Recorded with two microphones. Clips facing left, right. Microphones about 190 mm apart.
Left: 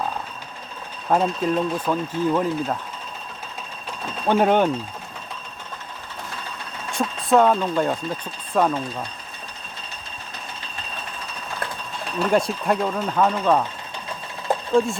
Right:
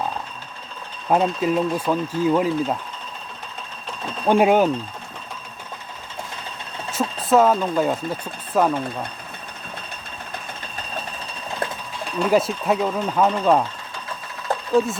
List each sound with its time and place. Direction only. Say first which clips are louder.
1.0 s speech: right 1 dB; 5° right (ahead or behind)
4.3 s speech: right 2 dB; 10° right (ahead or behind)
6.9 s speech: right 1 dB; 5° right (ahead or behind)
12.2 s speech: right 1 dB; 5° right (ahead or behind)
14.7 s speech: right 1 dB; centre (ahead or behind)